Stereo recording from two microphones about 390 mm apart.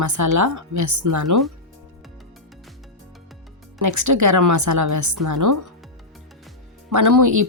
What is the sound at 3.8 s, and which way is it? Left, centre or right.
Speech, right.